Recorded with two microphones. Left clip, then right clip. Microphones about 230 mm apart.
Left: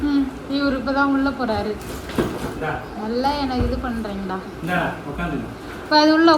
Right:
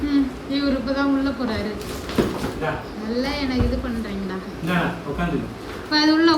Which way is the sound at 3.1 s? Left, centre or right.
Centre.